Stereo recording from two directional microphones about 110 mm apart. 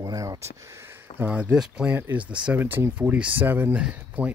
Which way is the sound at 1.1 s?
15° right (ahead or behind).